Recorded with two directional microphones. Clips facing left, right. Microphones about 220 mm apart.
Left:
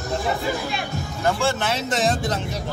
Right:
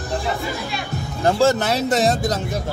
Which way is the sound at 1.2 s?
35° right (ahead or behind).